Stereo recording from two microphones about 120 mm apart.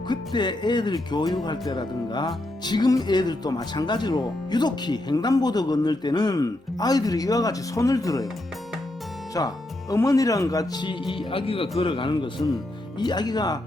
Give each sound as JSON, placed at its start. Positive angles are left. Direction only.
{"t": 0.1, "sound": "speech", "side_deg": 40}
{"t": 9.4, "sound": "speech", "side_deg": 30}
{"t": 11.1, "sound": "speech", "side_deg": 45}